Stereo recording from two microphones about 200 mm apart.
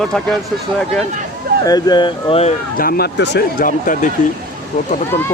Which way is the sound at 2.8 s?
50° left (ahead or behind).